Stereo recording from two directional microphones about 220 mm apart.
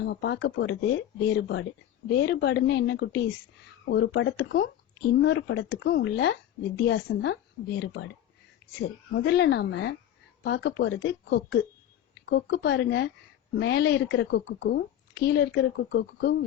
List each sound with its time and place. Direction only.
0.0 s a woman's voice: 50° left (ahead or behind)
9.1 s a woman's voice: 50° left (ahead or behind)